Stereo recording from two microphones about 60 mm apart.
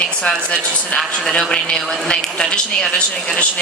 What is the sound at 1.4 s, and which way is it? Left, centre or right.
A woman's voice, centre.